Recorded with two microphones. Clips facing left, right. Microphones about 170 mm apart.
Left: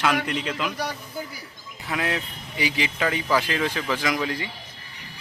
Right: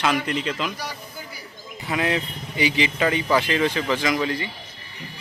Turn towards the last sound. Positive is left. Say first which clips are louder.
# right 3 dB
turn(degrees=0)  # may be behind; listen again after turning